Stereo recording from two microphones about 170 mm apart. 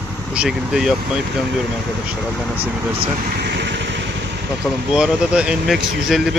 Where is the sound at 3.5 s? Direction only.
90° right.